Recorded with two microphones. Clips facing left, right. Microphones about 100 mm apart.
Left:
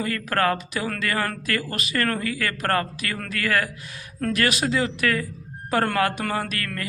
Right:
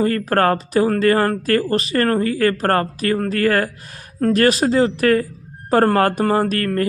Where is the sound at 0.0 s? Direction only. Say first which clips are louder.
Right 7 dB; 40° right (ahead or behind).